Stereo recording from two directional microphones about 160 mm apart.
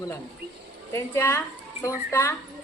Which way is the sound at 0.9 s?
15° left (ahead or behind).